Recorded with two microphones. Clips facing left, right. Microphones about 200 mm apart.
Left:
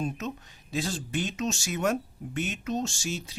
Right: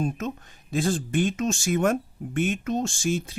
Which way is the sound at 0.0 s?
50° right (ahead or behind).